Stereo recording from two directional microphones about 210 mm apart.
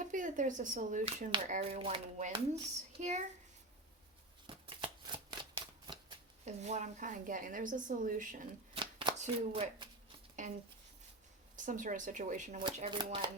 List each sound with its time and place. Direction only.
0.0 s a woman's voice: 35° right (ahead or behind)
4.4 s shuffling cards: 25° right (ahead or behind)
6.4 s a woman's voice: 35° right (ahead or behind)
8.7 s shuffling cards: 25° right (ahead or behind)
10.4 s a woman's voice: 35° right (ahead or behind)
12.5 s speech: 25° right (ahead or behind)